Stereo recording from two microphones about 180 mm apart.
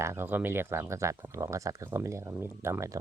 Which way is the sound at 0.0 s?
15° right (ahead or behind).